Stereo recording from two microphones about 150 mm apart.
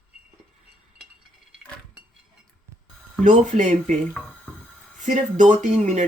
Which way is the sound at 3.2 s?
55° right (ahead or behind).